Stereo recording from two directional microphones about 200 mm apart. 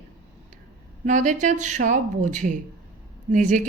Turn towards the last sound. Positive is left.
turn(degrees=-40)  # may be behind; listen again after turning